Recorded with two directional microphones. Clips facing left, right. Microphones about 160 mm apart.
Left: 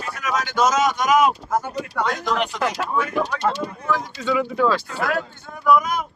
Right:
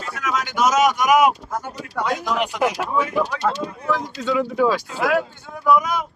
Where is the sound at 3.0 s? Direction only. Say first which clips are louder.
Right 1 dB; 5° left (ahead or behind).